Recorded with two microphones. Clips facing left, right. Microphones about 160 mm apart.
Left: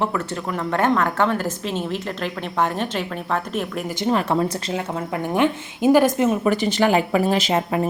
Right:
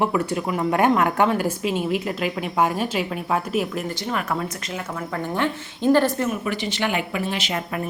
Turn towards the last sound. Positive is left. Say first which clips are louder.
# left 6 dB
turn(degrees=25)  # may be behind; listen again after turning